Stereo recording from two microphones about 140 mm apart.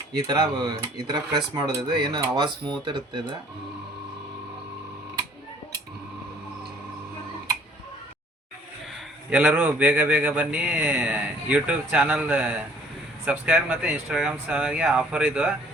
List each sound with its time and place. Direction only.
0.1 s speech: 30° right (ahead or behind)
9.3 s speech: 10° right (ahead or behind)